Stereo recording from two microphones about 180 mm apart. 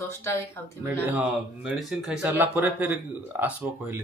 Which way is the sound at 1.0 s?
10° right (ahead or behind).